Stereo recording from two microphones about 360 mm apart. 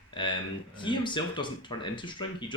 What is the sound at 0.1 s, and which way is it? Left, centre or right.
Speech, centre.